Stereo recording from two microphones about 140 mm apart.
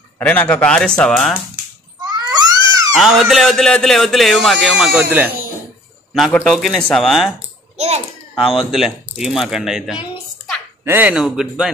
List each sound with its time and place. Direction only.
0.2 s speech: 10° left (ahead or behind)
2.0 s a sound: 30° right (ahead or behind)
3.0 s speech: centre (ahead or behind)
7.7 s a sound: 50° right (ahead or behind)
8.4 s speech: centre (ahead or behind)
10.8 s speech: 15° right (ahead or behind)